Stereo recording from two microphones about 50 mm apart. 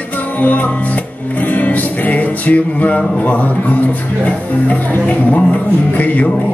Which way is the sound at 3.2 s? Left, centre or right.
Left.